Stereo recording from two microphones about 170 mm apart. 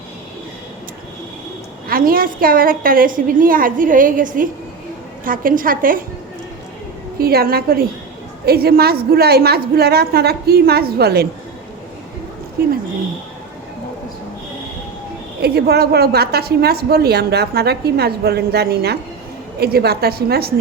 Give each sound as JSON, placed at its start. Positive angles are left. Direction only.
{"t": 1.9, "sound": "a woman's voice", "side_deg": -60}
{"t": 7.2, "sound": "a woman's voice", "side_deg": -65}
{"t": 15.4, "sound": "a woman's voice", "side_deg": -70}